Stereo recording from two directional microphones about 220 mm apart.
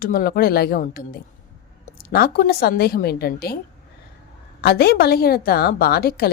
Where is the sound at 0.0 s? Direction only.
40° left (ahead or behind).